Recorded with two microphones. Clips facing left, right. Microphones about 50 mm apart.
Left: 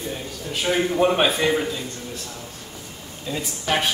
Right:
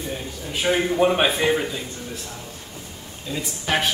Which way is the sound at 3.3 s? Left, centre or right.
Centre.